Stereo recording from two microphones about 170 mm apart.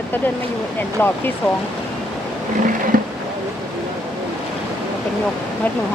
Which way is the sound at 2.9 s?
55° right (ahead or behind).